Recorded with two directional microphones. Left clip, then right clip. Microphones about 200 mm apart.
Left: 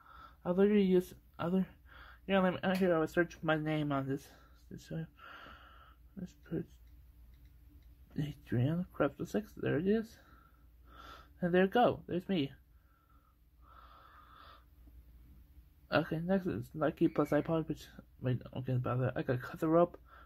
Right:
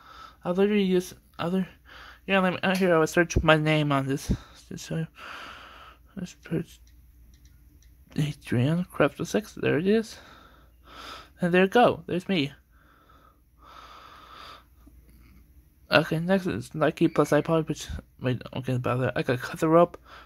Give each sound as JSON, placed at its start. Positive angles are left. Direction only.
{"t": 0.0, "sound": "speech", "side_deg": -15}
{"t": 4.6, "sound": "a sound", "side_deg": -20}
{"t": 8.1, "sound": "speech", "side_deg": -20}
{"t": 13.7, "sound": "wheeze", "side_deg": -20}
{"t": 15.9, "sound": "speech", "side_deg": -20}